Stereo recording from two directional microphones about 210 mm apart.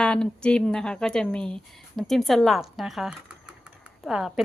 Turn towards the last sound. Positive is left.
turn(degrees=0)  # may be behind; listen again after turning